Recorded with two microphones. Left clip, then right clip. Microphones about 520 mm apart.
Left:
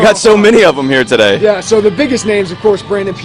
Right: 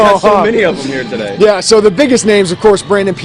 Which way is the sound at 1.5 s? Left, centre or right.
Right.